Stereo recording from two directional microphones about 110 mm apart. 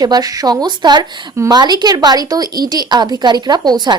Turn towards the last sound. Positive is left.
turn(degrees=-40)  # may be behind; listen again after turning